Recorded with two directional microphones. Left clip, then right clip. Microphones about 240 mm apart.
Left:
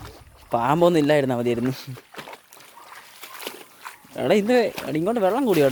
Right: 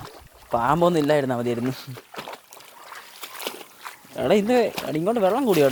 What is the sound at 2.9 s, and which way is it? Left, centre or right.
Splash, right.